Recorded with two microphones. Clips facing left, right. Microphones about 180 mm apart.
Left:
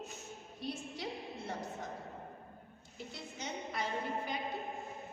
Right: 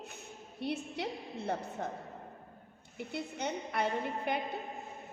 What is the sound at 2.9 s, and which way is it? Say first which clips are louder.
A woman's voice: right 8 dB; 60° right (ahead or behind).